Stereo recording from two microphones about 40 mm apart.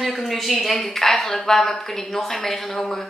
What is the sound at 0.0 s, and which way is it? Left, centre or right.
A woman's voice, centre.